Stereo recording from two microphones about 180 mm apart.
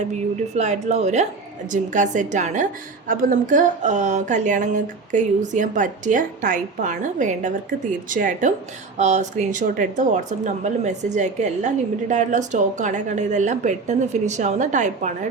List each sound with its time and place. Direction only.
0.5 s a woman's voice: 40° right (ahead or behind)